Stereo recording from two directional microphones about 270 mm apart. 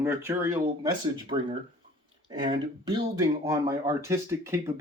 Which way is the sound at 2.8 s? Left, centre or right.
Centre.